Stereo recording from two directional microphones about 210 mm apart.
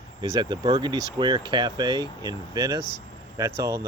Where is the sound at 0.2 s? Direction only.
20° right (ahead or behind).